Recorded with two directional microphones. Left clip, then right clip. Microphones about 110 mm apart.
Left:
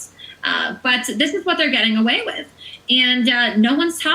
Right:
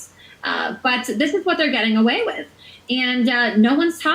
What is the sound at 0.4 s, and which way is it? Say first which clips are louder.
A woman's voice: left 2 dB; 30° left (ahead or behind).